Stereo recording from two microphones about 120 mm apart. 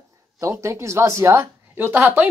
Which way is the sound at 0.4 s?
25° right (ahead or behind).